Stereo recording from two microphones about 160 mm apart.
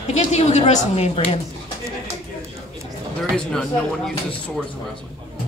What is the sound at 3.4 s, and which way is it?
Speech, 5° left (ahead or behind).